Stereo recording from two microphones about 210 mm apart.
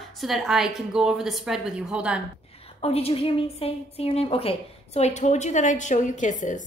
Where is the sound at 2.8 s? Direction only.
30° left (ahead or behind).